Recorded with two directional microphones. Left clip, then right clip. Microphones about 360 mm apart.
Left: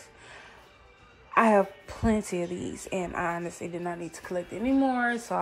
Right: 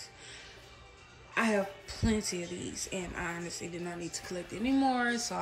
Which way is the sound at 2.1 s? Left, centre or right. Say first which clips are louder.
Left 5 dB; left.